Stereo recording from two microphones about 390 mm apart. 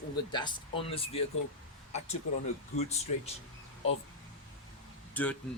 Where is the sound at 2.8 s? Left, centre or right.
Centre.